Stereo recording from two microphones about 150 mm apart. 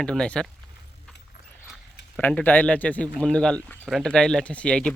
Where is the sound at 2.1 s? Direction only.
10° left (ahead or behind).